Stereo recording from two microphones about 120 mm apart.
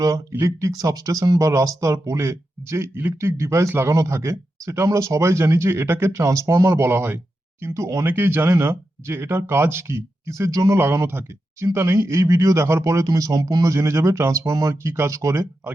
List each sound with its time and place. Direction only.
0.0 s speech: 25° right (ahead or behind)